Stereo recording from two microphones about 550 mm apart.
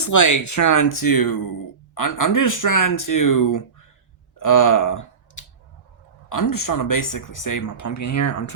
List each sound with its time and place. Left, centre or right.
0.0 s speech: left
4.4 s clicking: left
6.2 s speech: left